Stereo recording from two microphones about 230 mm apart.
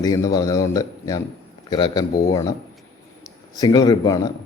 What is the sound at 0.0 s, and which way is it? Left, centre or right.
A man's voice, centre.